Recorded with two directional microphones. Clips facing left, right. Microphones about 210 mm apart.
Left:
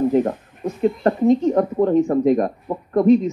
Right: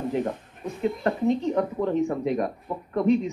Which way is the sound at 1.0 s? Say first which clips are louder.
Left 8 dB; 45° left (ahead or behind).